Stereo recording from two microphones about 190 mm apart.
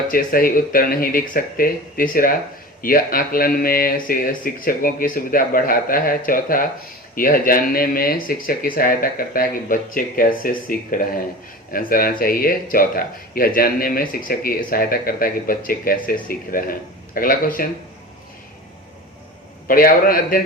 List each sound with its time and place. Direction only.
0.1 s speech: 50° left (ahead or behind)
19.6 s speech: 50° left (ahead or behind)